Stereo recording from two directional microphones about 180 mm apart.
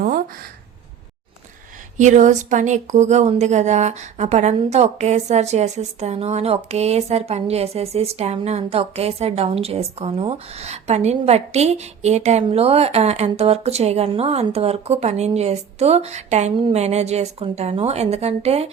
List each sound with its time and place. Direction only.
2.0 s speech: 40° right (ahead or behind)